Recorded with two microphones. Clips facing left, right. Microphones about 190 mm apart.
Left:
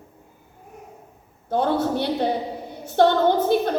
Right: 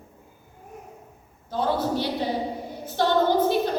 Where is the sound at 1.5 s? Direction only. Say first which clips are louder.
Left 3 dB; 55° left (ahead or behind).